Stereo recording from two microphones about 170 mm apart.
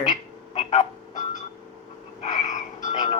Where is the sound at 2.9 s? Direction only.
45° left (ahead or behind).